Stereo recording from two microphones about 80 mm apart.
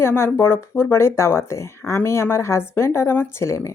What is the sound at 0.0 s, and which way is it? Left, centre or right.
Speech, left.